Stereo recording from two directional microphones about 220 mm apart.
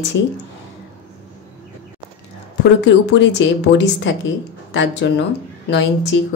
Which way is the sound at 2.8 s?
55° left (ahead or behind).